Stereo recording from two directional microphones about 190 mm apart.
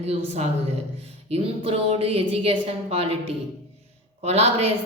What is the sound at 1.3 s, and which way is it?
A woman's voice, 30° right (ahead or behind).